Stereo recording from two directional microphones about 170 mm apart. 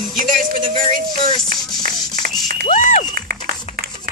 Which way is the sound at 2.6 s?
45° left (ahead or behind).